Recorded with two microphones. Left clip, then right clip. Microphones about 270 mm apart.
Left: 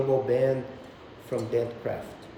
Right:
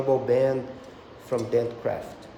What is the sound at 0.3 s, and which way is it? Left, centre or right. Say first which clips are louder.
A man's voice: right 2 dB; centre.